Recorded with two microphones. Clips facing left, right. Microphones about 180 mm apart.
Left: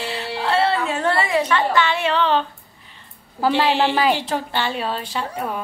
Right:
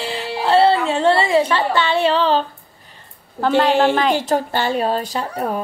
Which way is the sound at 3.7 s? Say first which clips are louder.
Right 3 dB; 45° right (ahead or behind).